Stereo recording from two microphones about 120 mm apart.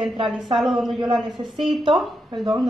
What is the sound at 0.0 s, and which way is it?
A woman's voice, centre (ahead or behind).